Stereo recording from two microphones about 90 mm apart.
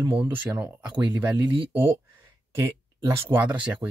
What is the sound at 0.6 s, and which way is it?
Speech, 20° right (ahead or behind).